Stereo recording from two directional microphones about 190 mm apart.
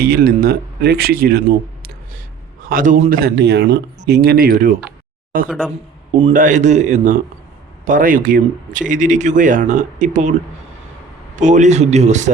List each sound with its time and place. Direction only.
0.0 s speech: 55° right (ahead or behind)
4.9 s a sound: 50° right (ahead or behind)
6.3 s a man's voice: 40° right (ahead or behind)
11.3 s a man's voice: 40° right (ahead or behind)